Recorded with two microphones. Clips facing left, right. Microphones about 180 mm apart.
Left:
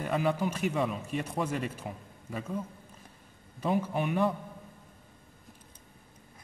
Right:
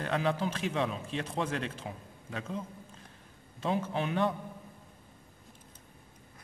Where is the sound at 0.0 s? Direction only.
5° left (ahead or behind).